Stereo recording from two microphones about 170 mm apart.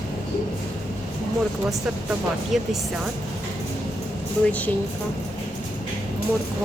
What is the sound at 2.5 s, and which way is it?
Speech, centre (ahead or behind).